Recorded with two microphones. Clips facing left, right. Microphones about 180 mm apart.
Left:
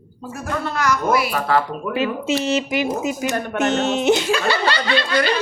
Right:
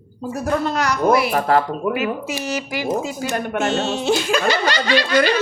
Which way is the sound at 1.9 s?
25° left (ahead or behind).